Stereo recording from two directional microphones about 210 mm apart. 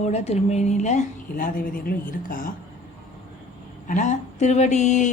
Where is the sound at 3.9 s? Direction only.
35° left (ahead or behind).